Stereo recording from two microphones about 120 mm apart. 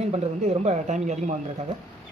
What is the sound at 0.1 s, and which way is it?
Speech, 60° right (ahead or behind).